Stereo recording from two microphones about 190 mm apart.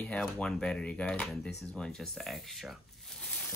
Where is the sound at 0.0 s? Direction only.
5° left (ahead or behind).